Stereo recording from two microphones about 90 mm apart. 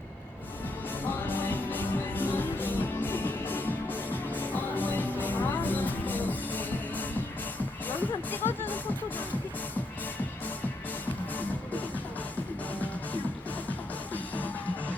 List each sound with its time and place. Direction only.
1.0 s music: 20° left (ahead or behind)
14.1 s music: 20° left (ahead or behind)